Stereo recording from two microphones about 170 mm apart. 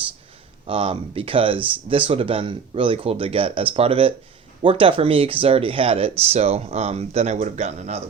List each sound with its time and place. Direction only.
0.7 s speech: 30° right (ahead or behind)